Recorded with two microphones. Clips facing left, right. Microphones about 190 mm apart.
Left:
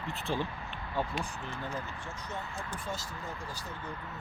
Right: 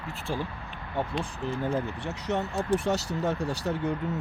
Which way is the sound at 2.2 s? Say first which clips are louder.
Right 14 dB; 80° right.